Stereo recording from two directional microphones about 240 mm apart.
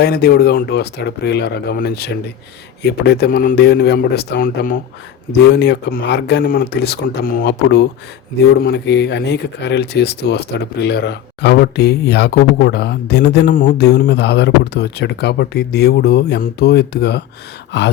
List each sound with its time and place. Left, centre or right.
0.0 s speech: left
17.7 s gasp: left